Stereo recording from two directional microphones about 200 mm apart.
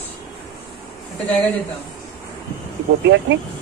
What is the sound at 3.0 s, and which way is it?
Speech, 60° right (ahead or behind).